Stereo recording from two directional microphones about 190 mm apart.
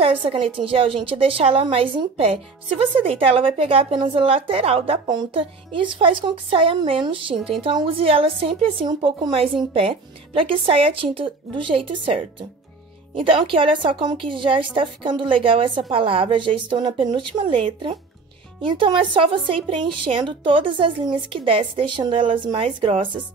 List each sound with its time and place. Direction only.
0.0 s a woman's voice: 30° right (ahead or behind)